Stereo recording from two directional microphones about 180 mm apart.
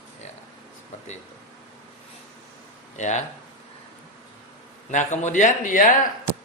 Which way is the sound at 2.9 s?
40° left (ahead or behind).